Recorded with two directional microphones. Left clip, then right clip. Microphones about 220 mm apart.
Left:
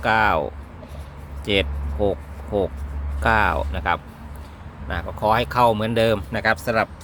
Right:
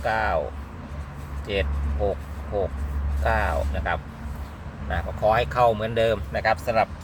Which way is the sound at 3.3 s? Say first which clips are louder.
Left 5 dB; 55° left (ahead or behind).